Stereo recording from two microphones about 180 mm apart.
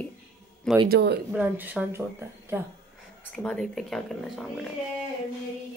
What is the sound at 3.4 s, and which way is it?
Speech, 5° left (ahead or behind).